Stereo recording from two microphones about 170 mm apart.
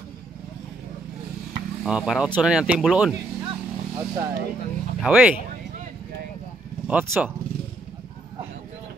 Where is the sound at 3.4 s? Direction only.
25° right (ahead or behind).